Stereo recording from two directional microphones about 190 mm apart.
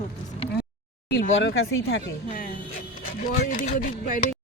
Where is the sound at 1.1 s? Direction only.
75° left (ahead or behind).